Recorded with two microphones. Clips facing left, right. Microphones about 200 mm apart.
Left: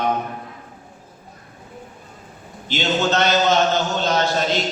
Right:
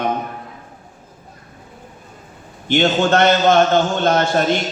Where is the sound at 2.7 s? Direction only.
55° right (ahead or behind).